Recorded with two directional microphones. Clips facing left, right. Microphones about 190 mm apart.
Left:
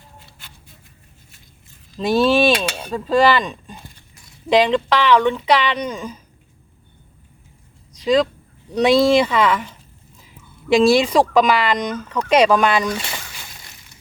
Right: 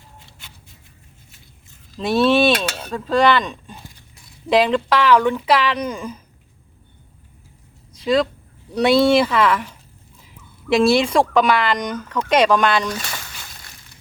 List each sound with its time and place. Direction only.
2.0 s speech: centre (ahead or behind)
2.6 s cutlery: 5° right (ahead or behind)
4.4 s speech: centre (ahead or behind)
8.0 s speech: 5° right (ahead or behind)
10.8 s speech: centre (ahead or behind)